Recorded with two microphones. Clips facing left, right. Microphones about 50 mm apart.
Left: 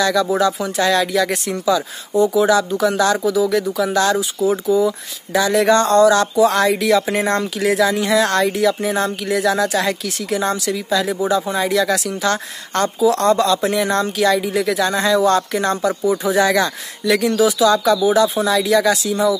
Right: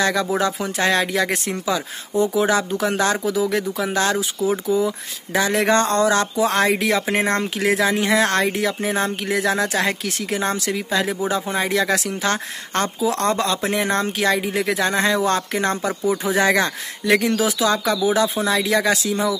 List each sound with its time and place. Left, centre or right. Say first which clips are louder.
0.0 s speech: left 3 dB; right